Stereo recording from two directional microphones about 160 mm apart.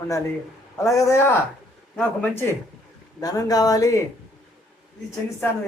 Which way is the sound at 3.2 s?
25° left (ahead or behind).